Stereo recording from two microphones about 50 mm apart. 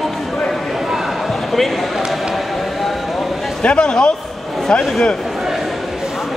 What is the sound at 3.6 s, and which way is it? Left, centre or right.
Speech, centre.